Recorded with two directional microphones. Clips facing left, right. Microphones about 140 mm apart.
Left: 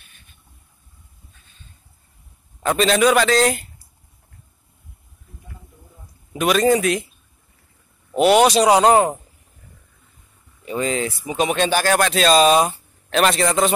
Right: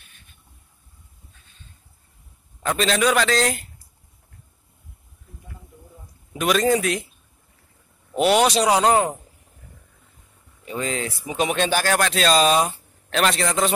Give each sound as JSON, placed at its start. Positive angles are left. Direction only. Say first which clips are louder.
{"t": 2.8, "sound": "speech", "louder": "left 4 dB", "side_deg": 10}
{"t": 6.3, "sound": "speech", "louder": "left 3 dB", "side_deg": 5}
{"t": 8.1, "sound": "speech", "louder": "left 4 dB", "side_deg": 5}
{"t": 8.5, "sound": "speech", "louder": "left 4 dB", "side_deg": 20}
{"t": 8.9, "sound": "a man's voice", "louder": "left 4 dB", "side_deg": 40}
{"t": 10.8, "sound": "speech", "louder": "left 4 dB", "side_deg": 15}